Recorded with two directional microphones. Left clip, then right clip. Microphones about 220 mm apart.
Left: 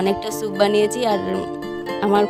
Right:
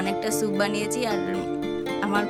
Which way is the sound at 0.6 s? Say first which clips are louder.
Left 8 dB; 30° left (ahead or behind).